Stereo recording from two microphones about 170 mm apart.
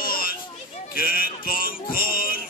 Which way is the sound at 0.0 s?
60° left (ahead or behind).